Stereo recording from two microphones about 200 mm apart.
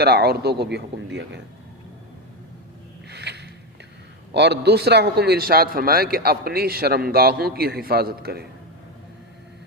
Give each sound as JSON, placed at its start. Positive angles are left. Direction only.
{"t": 0.0, "sound": "a man's voice", "side_deg": -50}
{"t": 3.1, "sound": "a sound", "side_deg": -55}
{"t": 4.4, "sound": "speech", "side_deg": -55}